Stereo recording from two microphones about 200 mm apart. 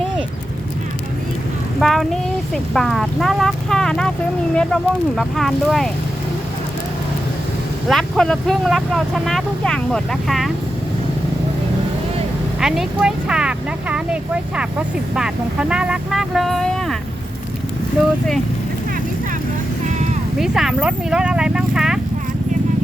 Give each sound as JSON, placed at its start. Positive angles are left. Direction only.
{"t": 1.8, "sound": "a sound", "side_deg": 0}
{"t": 2.7, "sound": "speech", "side_deg": 0}
{"t": 7.9, "sound": "speech", "side_deg": 0}
{"t": 12.5, "sound": "speech", "side_deg": 0}
{"t": 19.8, "sound": "vehicle", "side_deg": -35}
{"t": 20.4, "sound": "speech", "side_deg": 0}